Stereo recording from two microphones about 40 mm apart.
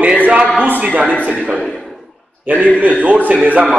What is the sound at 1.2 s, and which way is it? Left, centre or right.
Speech, right.